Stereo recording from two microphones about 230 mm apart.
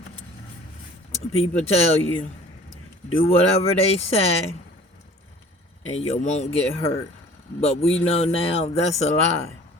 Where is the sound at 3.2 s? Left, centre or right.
Left.